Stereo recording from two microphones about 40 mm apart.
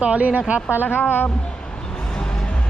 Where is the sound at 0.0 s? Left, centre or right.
Right.